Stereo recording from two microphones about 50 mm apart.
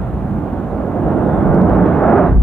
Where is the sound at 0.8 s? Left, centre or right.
Centre.